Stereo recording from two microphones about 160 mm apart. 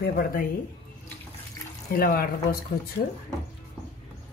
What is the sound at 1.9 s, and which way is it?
Speech, 65° left (ahead or behind).